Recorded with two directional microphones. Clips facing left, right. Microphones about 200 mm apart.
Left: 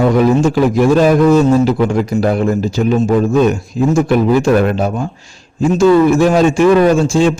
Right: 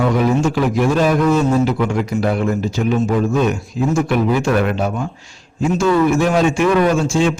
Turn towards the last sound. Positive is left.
turn(degrees=35)  # may be behind; listen again after turning